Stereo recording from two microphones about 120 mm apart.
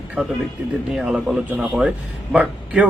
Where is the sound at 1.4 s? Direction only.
15° right (ahead or behind).